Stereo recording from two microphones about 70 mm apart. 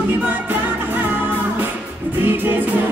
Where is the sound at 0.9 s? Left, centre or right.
Right.